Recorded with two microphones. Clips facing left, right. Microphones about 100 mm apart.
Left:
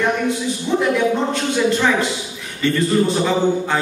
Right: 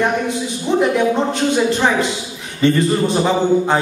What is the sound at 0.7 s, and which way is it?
A man's voice, 20° right (ahead or behind).